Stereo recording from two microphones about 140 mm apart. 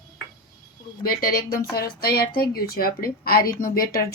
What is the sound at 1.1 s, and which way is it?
A woman's voice, 90° left.